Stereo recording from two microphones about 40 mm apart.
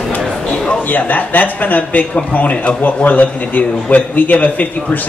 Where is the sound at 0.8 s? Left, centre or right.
Left.